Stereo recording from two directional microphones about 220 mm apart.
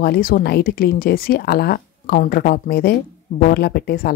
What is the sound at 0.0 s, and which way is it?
Speech, 45° left (ahead or behind).